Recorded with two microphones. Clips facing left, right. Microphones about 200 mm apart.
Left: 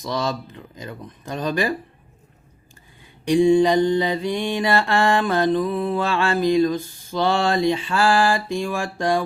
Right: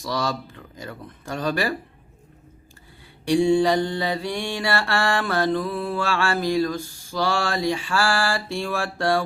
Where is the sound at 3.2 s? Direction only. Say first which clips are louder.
Left 3 dB; 15° left (ahead or behind).